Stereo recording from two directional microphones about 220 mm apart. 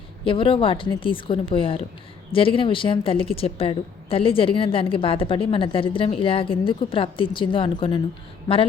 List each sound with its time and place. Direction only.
0.3 s a woman's voice: 25° left (ahead or behind)